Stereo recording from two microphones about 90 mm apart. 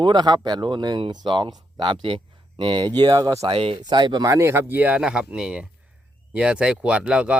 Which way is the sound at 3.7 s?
55° right (ahead or behind).